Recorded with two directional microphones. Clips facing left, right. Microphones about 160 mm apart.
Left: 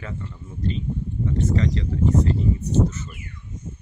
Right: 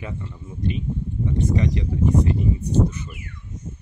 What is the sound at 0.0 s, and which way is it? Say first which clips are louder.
Speech: right 1 dB; 15° right (ahead or behind).